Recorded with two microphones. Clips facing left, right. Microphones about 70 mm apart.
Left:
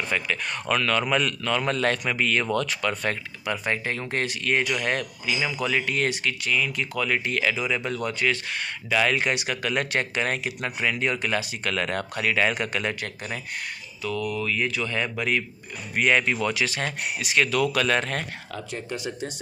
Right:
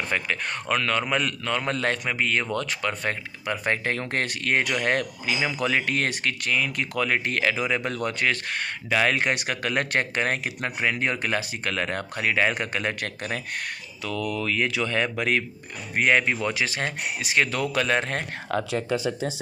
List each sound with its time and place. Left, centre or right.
0.1 s speech: right
3.6 s speech: right
13.0 s speech: right
14.0 s speech: right
14.4 s speech: right
15.9 s speech: right
18.5 s speech: right